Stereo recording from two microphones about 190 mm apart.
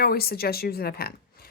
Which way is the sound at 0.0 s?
55° left (ahead or behind).